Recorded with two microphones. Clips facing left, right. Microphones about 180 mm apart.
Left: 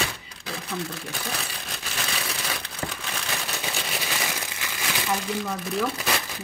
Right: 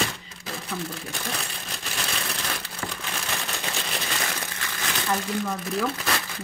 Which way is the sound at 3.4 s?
5° left (ahead or behind).